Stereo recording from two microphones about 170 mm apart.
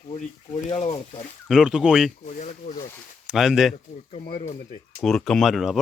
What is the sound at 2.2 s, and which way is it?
Speech, 45° left (ahead or behind).